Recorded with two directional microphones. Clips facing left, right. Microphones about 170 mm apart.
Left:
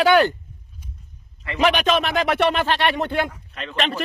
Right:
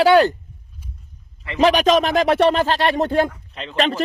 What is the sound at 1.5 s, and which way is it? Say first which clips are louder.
Speech: right 4 dB; 35° right (ahead or behind).